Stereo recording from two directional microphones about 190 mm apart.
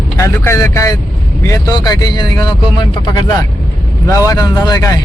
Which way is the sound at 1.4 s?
20° left (ahead or behind).